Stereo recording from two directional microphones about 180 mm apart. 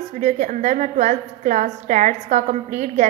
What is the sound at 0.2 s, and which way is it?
A woman's voice, 40° right (ahead or behind).